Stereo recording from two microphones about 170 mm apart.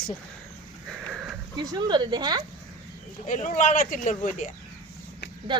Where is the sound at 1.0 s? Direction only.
5° right (ahead or behind).